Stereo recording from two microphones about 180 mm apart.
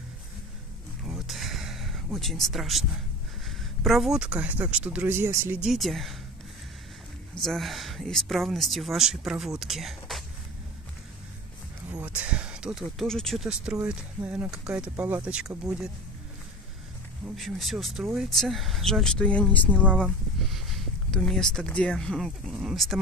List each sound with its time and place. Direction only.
1.0 s a sound: 5° right (ahead or behind)
3.4 s speech: centre (ahead or behind)
7.4 s speech: centre (ahead or behind)
11.9 s speech: 10° right (ahead or behind)
17.4 s speech: centre (ahead or behind)